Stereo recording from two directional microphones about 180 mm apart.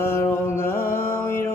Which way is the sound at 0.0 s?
15° left (ahead or behind).